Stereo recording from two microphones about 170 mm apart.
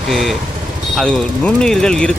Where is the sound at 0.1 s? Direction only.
Centre (ahead or behind).